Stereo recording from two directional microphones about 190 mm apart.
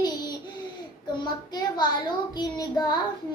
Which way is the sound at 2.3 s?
20° left (ahead or behind).